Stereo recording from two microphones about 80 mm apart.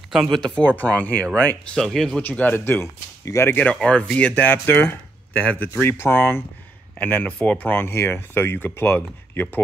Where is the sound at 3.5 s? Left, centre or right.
Centre.